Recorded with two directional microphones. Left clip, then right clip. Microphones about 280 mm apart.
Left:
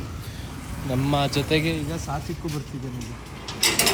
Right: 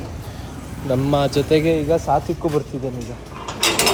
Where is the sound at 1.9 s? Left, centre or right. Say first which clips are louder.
Right 14 dB; centre.